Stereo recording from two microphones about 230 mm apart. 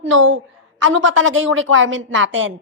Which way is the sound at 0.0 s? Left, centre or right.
Right.